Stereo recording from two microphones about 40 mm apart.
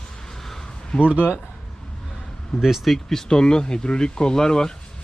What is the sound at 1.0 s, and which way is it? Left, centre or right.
Speech, right.